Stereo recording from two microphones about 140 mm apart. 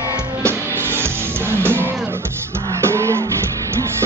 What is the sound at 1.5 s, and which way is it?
Music, 15° right (ahead or behind).